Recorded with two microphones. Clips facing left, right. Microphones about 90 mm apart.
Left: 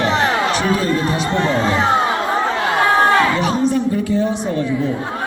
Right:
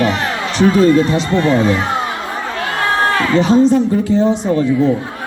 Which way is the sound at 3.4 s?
25° right (ahead or behind).